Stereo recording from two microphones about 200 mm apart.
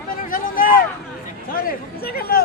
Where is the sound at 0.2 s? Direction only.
45° left (ahead or behind).